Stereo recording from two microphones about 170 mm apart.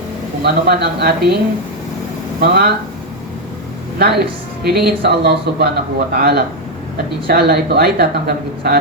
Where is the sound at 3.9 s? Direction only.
70° right (ahead or behind).